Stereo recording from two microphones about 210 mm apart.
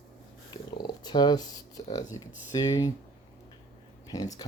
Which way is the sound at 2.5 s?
15° left (ahead or behind).